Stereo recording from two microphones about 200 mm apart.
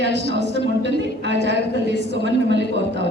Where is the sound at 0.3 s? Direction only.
60° right (ahead or behind).